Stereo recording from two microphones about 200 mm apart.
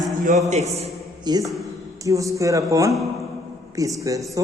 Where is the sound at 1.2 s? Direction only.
20° right (ahead or behind).